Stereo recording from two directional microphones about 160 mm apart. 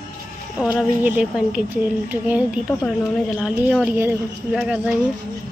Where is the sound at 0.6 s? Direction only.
5° right (ahead or behind).